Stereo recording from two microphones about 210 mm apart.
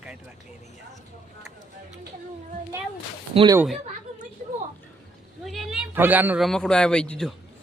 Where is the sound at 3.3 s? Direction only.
20° right (ahead or behind).